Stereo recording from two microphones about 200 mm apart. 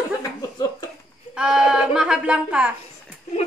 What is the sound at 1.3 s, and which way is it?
A woman's voice, 5° right (ahead or behind).